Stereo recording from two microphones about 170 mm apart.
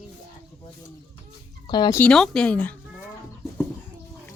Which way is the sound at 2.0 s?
5° left (ahead or behind).